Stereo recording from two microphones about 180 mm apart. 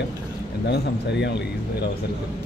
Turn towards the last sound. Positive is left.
turn(degrees=70)  # may be behind; listen again after turning